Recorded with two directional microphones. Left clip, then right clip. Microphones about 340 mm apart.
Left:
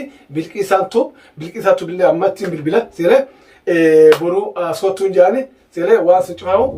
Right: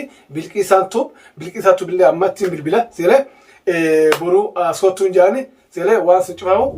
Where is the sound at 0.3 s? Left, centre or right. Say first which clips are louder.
Right 1 dB; centre.